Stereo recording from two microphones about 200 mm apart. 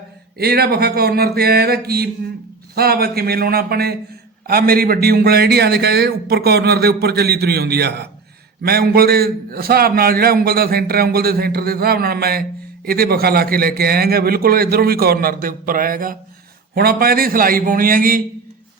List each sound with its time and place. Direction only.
0.3 s a man's voice: 50° right (ahead or behind)